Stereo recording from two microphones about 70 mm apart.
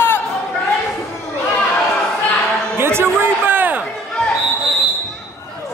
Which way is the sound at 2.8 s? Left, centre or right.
Right.